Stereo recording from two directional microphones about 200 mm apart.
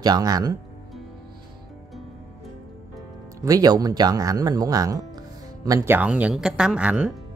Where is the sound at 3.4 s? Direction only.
15° right (ahead or behind).